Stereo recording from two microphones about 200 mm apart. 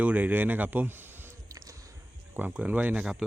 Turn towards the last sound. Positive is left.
turn(degrees=-5)  # may be behind; listen again after turning